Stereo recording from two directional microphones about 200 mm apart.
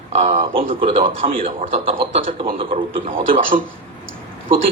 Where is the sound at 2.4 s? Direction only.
25° right (ahead or behind).